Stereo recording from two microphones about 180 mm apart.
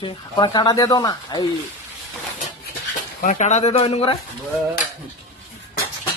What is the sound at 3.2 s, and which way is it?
Speech, 40° left (ahead or behind).